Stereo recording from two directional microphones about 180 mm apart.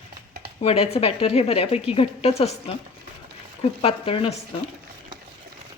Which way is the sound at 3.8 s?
30° left (ahead or behind).